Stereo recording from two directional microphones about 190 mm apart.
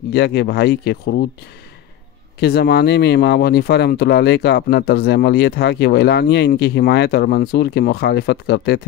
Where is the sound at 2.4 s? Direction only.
55° left (ahead or behind).